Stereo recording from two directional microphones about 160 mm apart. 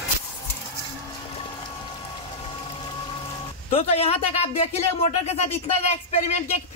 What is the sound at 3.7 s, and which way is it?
Speech, 40° left (ahead or behind).